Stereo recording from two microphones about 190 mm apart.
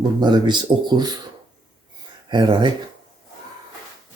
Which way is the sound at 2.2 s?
25° right (ahead or behind).